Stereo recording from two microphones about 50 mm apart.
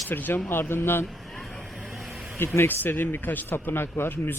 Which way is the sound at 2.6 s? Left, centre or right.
Left.